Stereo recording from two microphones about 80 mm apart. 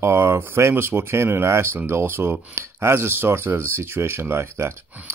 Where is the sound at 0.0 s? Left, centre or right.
Right.